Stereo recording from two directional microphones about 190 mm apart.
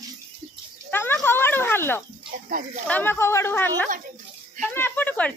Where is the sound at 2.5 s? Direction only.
45° right (ahead or behind).